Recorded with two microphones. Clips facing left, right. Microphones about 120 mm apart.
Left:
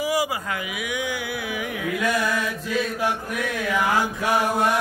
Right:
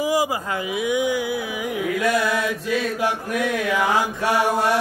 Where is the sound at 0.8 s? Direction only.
20° right (ahead or behind).